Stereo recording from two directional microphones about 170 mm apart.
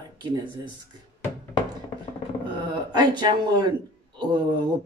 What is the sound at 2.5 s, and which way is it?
A man's voice, 25° right (ahead or behind).